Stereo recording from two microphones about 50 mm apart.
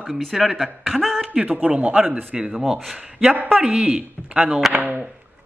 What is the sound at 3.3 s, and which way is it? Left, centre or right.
Speech, right.